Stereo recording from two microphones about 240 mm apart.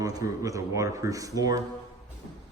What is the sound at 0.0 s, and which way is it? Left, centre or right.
Speech, centre.